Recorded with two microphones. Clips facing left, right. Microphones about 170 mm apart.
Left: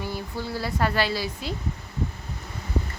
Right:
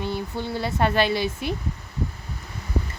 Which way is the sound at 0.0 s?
20° right (ahead or behind).